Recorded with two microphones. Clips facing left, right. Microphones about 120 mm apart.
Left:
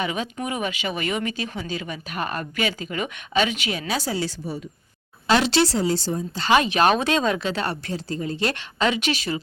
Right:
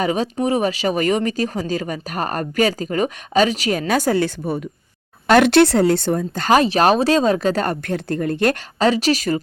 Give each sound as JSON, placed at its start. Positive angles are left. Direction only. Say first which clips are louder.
{"t": 0.0, "sound": "speech", "louder": "right 7 dB", "side_deg": -40}
{"t": 8.8, "sound": "speech", "louder": "right 6 dB", "side_deg": -35}